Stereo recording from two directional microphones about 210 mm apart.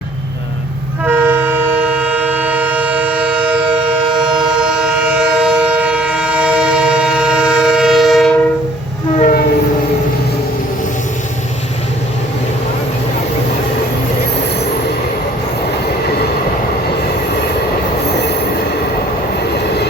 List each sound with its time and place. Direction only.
1.0 s train: 5° right (ahead or behind)
9.1 s train: 35° left (ahead or behind)